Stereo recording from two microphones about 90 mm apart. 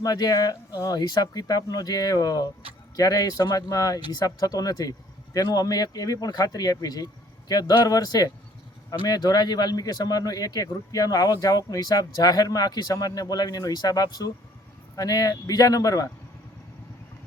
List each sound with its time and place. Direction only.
0.0 s speech: 45° left (ahead or behind)